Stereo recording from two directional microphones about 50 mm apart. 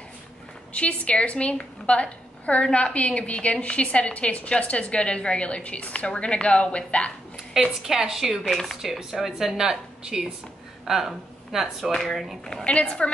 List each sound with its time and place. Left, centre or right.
0.7 s a woman's voice: left
7.8 s speech: centre
8.5 s speech: centre
8.8 s speech: centre
11.9 s speech: centre
12.6 s a woman's voice: left